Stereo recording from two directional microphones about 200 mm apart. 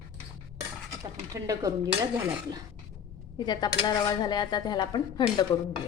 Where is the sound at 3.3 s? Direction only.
20° left (ahead or behind).